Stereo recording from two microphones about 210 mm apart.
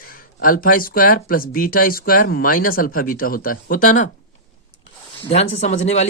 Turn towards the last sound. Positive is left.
turn(degrees=30)  # may be behind; listen again after turning